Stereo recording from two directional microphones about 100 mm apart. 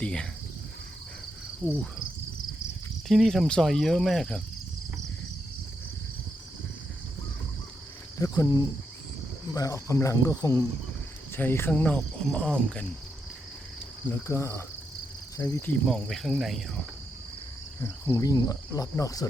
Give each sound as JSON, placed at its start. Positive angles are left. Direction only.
{"t": 0.0, "sound": "insect", "side_deg": 10}
{"t": 3.1, "sound": "cricket", "side_deg": 0}
{"t": 8.2, "sound": "speech", "side_deg": 40}
{"t": 11.3, "sound": "speech", "side_deg": 20}
{"t": 11.7, "sound": "cricket", "side_deg": 10}
{"t": 14.3, "sound": "insect", "side_deg": 30}
{"t": 15.4, "sound": "speech", "side_deg": 35}
{"t": 15.9, "sound": "cricket", "side_deg": 0}
{"t": 17.8, "sound": "speech", "side_deg": 30}